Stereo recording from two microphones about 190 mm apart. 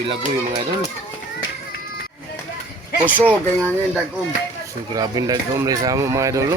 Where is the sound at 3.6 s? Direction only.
5° left (ahead or behind).